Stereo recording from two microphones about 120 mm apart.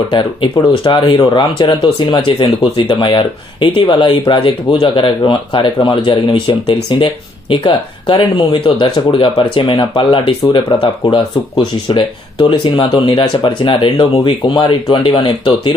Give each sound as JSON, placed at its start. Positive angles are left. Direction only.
{"t": 0.9, "sound": "speech", "side_deg": 45}